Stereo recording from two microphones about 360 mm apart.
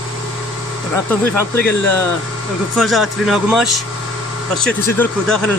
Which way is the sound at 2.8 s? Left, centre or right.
Centre.